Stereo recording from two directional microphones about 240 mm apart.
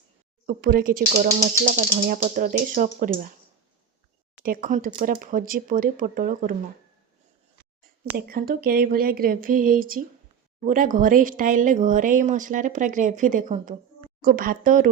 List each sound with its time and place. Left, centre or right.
0.4 s speech: right
4.4 s speech: right
8.1 s speech: right